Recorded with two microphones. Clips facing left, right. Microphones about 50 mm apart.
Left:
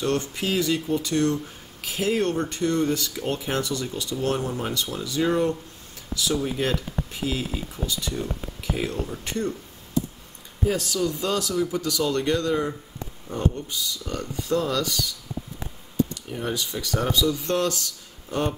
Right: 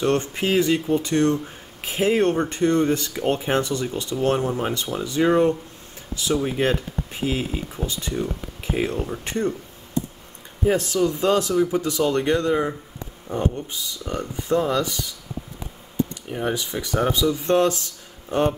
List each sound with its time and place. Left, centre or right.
0.0 s speech: right
10.6 s speech: right
16.3 s speech: right